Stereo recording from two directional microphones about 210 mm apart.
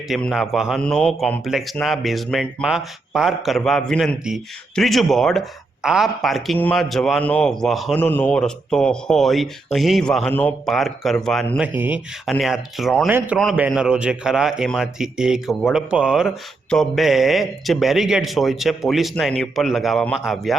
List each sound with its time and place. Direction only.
0.1 s a man's voice: centre (ahead or behind)